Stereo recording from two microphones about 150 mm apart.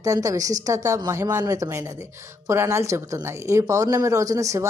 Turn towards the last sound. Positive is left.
turn(degrees=-20)  # may be behind; listen again after turning